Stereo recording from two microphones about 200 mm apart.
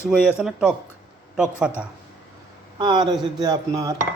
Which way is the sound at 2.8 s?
20° right (ahead or behind).